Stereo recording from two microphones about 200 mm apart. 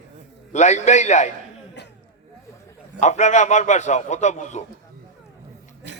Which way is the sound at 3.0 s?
35° left (ahead or behind).